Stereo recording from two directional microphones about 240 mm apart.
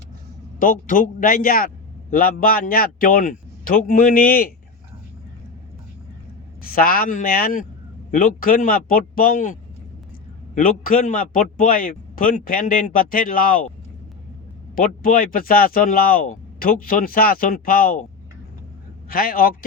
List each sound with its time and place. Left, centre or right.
0.6 s a man's voice: left
6.6 s a man's voice: left
14.8 s a man's voice: left
19.0 s a man's voice: left